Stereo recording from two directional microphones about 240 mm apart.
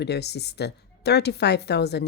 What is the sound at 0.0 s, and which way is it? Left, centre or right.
Speech, left.